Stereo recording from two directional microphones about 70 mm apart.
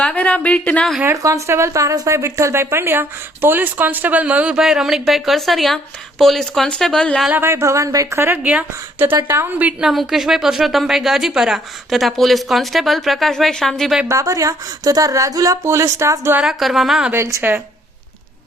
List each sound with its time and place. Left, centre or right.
0.0 s speech: left
1.1 s speech: right; by 4.6 s centre
4.6 s a woman's voice: centre
7.4 s speech: right
9.5 s a woman's voice: right
9.8 s a woman's voice: centre
14.1 s a woman's voice: right
15.6 s a woman's voice: right
16.4 s a woman's voice: centre